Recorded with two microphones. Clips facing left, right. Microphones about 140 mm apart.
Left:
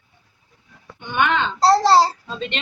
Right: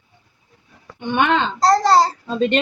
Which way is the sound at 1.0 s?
30° right (ahead or behind).